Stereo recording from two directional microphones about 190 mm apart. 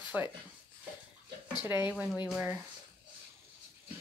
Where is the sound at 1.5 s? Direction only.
20° left (ahead or behind).